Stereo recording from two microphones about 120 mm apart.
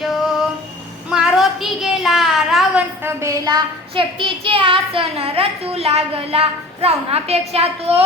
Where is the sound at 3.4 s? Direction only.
40° right (ahead or behind).